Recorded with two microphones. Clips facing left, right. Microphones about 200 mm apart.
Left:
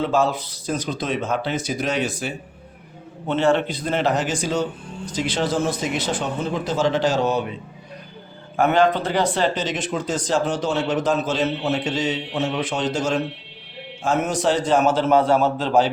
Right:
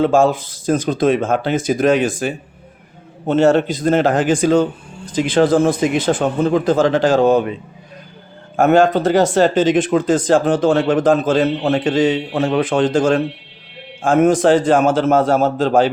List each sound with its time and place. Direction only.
0.0 s speech: 50° right (ahead or behind)
8.5 s speech: 45° right (ahead or behind)